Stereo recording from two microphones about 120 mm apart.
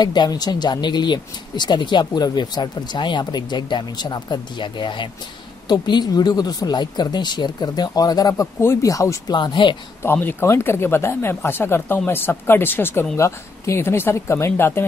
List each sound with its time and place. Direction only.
0.0 s speech: 35° left (ahead or behind)
9.3 s speech: 40° left (ahead or behind)
10.0 s speech: 20° left (ahead or behind)